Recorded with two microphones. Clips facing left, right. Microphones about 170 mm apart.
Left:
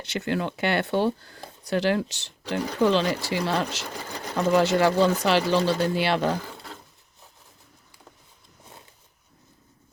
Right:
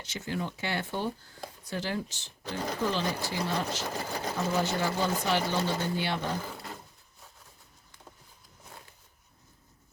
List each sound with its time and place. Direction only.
0.0 s speech: 70° left (ahead or behind); by 6.2 s 85° left